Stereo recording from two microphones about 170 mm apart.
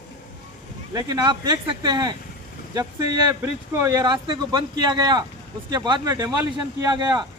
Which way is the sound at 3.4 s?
15° right (ahead or behind).